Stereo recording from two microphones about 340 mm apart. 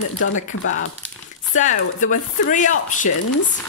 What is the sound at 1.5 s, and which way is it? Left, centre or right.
Speech, left.